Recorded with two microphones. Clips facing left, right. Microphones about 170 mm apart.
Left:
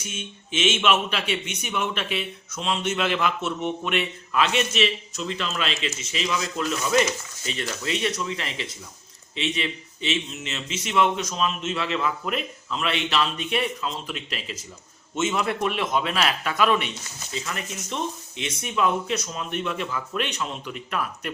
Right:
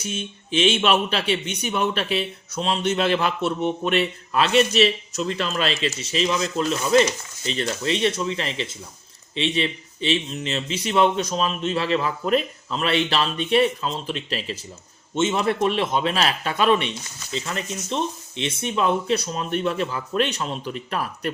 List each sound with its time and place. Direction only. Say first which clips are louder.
0.0 s speech: right 6 dB; 35° right (ahead or behind)